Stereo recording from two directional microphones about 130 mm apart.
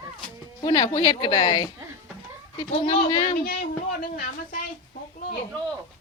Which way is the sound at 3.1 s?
40° left (ahead or behind).